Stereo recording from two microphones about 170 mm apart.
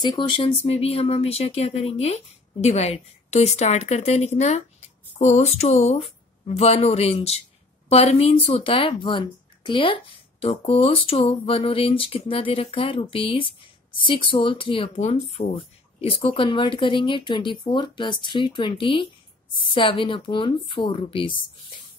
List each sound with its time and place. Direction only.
0.0 s speech: 25° left (ahead or behind)